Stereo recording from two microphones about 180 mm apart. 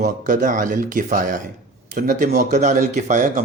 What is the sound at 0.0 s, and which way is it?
Speech, 45° right (ahead or behind).